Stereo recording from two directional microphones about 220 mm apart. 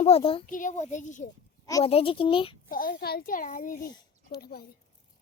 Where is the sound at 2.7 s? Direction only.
40° left (ahead or behind).